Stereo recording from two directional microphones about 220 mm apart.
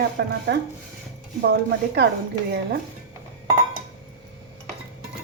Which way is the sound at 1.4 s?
50° right (ahead or behind).